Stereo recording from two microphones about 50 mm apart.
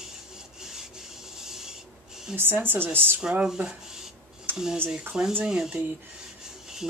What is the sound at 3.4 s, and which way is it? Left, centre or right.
Speech, centre.